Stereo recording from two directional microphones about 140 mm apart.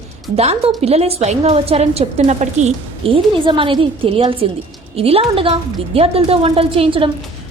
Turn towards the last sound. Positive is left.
turn(degrees=-40)  # may be behind; listen again after turning